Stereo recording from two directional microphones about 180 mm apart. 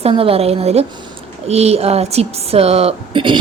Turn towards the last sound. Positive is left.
turn(degrees=-25)  # may be behind; listen again after turning